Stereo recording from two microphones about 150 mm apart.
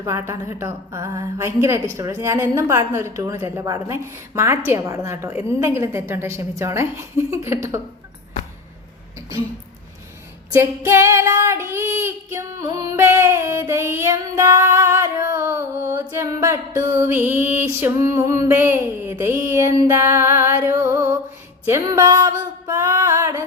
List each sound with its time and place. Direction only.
0.0 s a woman's voice: 20° right (ahead or behind)
10.5 s a woman's voice: 15° right (ahead or behind)
12.6 s music: 20° right (ahead or behind)
16.1 s a woman's voice: 20° right (ahead or behind)
21.7 s music: 20° right (ahead or behind)